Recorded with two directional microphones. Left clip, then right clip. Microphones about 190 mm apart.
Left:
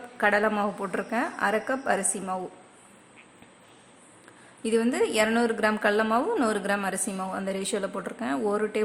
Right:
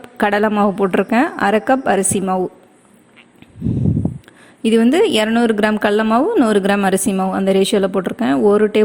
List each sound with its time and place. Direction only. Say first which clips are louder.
0.2 s a woman's voice: right 8 dB; 45° right (ahead or behind)
4.6 s a woman's voice: right 11 dB; 40° right (ahead or behind)